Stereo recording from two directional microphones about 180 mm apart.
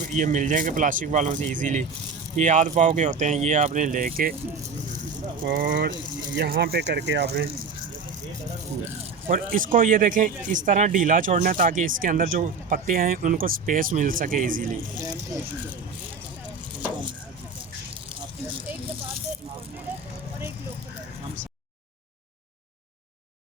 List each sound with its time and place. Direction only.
0.0 s speech: 45° right (ahead or behind)
5.5 s speech: 55° right (ahead or behind)
6.3 s speech: 65° right (ahead or behind)
9.3 s speech: 50° right (ahead or behind)